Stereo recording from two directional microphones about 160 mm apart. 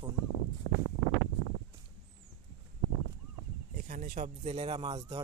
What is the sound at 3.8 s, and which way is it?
Speech, 55° right (ahead or behind).